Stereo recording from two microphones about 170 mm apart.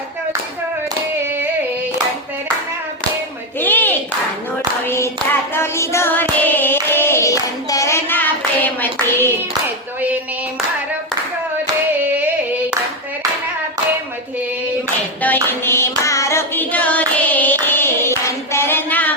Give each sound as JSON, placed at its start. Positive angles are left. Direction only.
{"t": 1.2, "sound": "hands", "side_deg": -10}
{"t": 3.6, "sound": "clapping", "side_deg": 10}
{"t": 5.5, "sound": "child singing", "side_deg": 15}
{"t": 8.6, "sound": "clapping", "side_deg": 10}
{"t": 15.2, "sound": "music", "side_deg": 10}